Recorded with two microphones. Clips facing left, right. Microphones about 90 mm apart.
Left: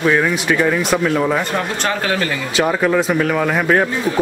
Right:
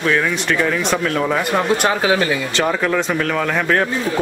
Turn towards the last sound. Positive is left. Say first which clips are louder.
# left 2 dB
turn(degrees=10)  # may be behind; listen again after turning